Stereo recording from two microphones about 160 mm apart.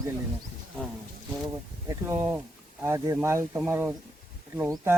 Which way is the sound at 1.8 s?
15° right (ahead or behind).